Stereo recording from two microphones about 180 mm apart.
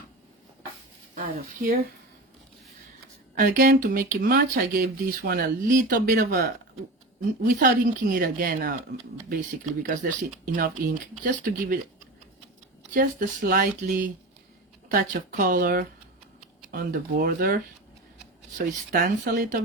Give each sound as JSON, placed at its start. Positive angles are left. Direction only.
{"t": 3.3, "sound": "speech", "side_deg": -50}
{"t": 9.8, "sound": "speech", "side_deg": -50}
{"t": 12.9, "sound": "speech", "side_deg": -50}